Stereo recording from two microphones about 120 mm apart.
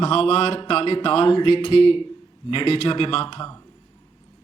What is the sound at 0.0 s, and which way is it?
A man's voice, 50° left (ahead or behind).